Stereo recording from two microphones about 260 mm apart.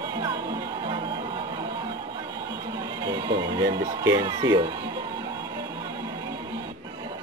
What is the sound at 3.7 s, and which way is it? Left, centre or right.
Speech, centre.